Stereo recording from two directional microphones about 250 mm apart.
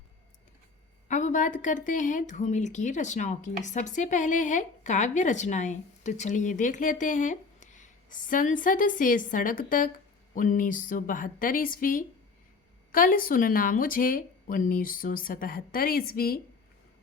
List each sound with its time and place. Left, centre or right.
1.0 s speech: left